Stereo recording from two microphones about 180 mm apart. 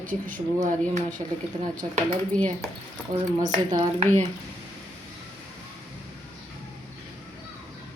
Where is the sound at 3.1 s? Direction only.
45° right (ahead or behind).